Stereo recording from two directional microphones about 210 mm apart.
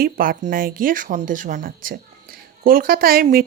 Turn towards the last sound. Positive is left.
turn(degrees=-40)  # may be behind; listen again after turning